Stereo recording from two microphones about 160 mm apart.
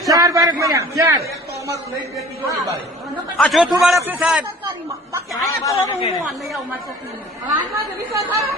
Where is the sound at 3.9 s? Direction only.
15° right (ahead or behind).